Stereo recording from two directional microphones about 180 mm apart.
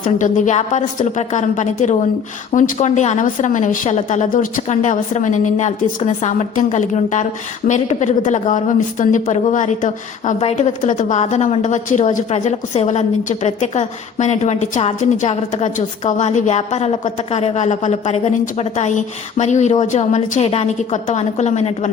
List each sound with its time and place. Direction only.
0.0 s a woman's voice: 45° left (ahead or behind)